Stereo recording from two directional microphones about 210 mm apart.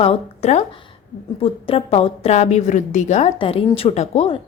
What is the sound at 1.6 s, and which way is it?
A woman's voice, 30° left (ahead or behind).